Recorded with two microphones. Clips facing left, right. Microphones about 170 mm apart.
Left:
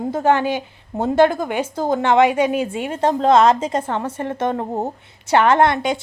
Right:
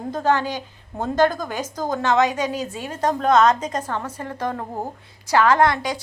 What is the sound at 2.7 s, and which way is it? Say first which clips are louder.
A woman's voice: left 4 dB; 25° left (ahead or behind).